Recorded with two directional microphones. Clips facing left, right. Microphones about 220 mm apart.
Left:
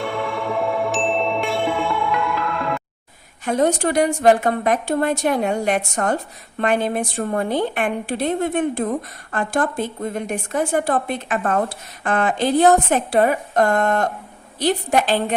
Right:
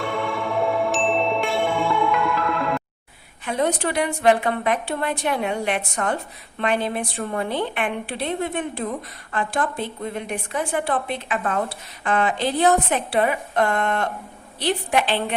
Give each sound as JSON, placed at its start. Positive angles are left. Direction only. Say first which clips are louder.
{"t": 0.0, "sound": "music", "louder": "left 1 dB", "side_deg": 0}
{"t": 3.4, "sound": "a woman's voice", "louder": "left 4 dB", "side_deg": 45}